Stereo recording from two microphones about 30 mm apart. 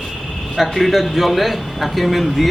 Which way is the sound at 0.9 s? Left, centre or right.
Centre.